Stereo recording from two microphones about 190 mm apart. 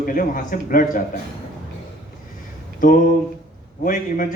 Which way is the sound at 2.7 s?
45° left (ahead or behind).